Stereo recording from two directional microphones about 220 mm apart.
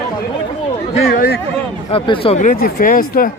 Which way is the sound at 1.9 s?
25° left (ahead or behind).